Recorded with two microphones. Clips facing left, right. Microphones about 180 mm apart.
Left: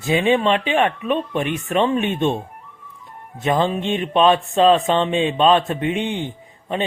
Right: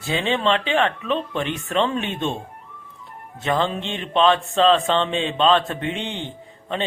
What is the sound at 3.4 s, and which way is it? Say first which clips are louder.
Speech: left 3 dB; 15° left (ahead or behind).